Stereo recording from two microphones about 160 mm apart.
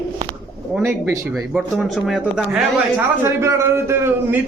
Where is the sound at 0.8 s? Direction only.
15° right (ahead or behind).